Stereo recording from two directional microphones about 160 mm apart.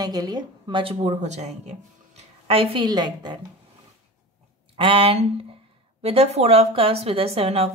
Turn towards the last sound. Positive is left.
turn(degrees=-40)  # may be behind; listen again after turning